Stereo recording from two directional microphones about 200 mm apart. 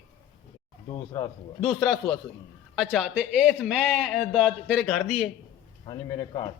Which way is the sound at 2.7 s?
5° right (ahead or behind).